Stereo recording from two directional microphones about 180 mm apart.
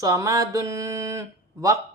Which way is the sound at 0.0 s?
15° right (ahead or behind).